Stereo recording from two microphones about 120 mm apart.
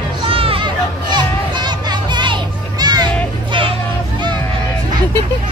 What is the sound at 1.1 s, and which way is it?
Children playing, 35° right (ahead or behind).